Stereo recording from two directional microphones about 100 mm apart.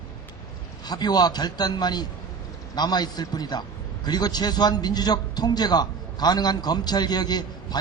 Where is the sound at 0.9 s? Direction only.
45° left (ahead or behind).